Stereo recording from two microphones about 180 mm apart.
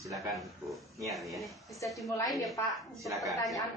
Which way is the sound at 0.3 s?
Centre (ahead or behind).